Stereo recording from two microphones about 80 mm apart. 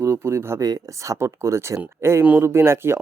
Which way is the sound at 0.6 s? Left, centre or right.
Right.